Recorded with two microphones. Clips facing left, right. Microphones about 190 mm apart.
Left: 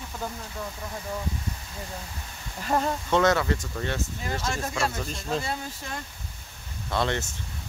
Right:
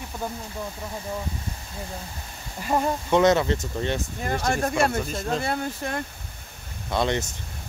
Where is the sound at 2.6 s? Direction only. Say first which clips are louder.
Right 2 dB; 15° right (ahead or behind).